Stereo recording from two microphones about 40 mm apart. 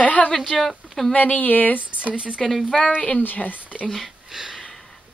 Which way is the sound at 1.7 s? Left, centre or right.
Right.